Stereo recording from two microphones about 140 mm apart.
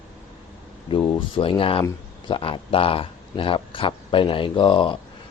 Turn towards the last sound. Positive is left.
turn(degrees=35)  # may be behind; listen again after turning